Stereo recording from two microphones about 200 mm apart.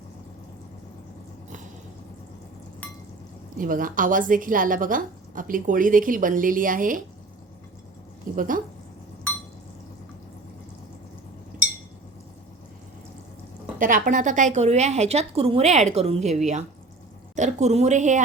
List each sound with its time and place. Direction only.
3.6 s a woman's voice: 45° right (ahead or behind)
8.4 s a woman's voice: 40° right (ahead or behind)
13.7 s a woman's voice: 40° right (ahead or behind)